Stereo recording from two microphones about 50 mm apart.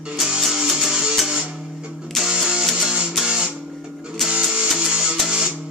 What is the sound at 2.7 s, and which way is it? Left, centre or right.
Music, centre.